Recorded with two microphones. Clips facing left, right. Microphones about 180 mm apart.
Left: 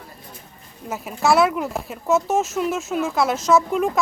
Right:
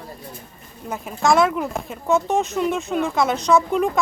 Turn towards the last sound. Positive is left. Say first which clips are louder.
# even
turn(degrees=0)  # may be behind; listen again after turning